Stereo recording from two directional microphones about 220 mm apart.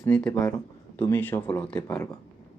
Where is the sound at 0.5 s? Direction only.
20° left (ahead or behind).